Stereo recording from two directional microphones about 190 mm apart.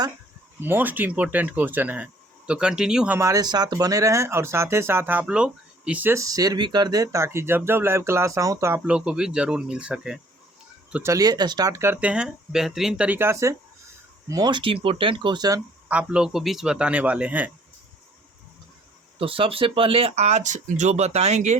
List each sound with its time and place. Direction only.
0.6 s speech: 10° right (ahead or behind)
10.9 s speech: 15° right (ahead or behind)
15.9 s speech: 5° right (ahead or behind)
19.2 s speech: 30° right (ahead or behind)